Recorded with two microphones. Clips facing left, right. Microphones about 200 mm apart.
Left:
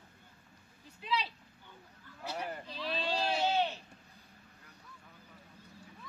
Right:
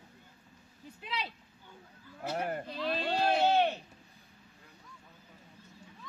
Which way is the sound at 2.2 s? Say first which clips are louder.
Right 5 dB; 50° right (ahead or behind).